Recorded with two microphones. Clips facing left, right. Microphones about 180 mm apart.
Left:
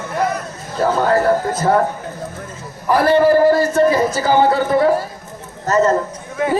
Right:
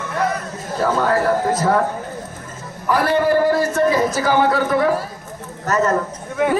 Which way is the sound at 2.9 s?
30° left (ahead or behind).